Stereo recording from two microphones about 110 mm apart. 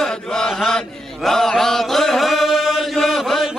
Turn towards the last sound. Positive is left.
turn(degrees=0)  # may be behind; listen again after turning